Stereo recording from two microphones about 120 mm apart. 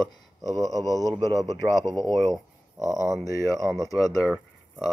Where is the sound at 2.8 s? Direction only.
25° right (ahead or behind).